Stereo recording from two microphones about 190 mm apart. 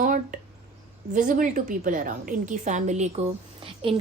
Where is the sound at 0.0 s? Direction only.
45° right (ahead or behind).